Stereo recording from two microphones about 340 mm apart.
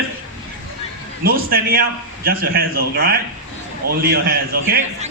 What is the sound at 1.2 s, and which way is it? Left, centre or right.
A man's voice, right.